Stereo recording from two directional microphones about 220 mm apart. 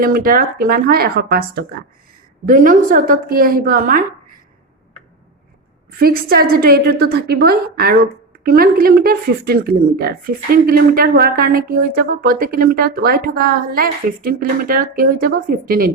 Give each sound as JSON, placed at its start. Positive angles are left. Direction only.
{"t": 0.0, "sound": "a woman's voice", "side_deg": -40}
{"t": 6.0, "sound": "a woman's voice", "side_deg": -45}